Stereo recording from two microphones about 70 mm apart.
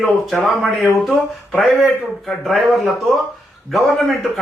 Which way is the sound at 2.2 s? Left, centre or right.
Centre.